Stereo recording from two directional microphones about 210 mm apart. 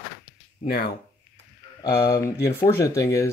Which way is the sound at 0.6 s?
40° left (ahead or behind).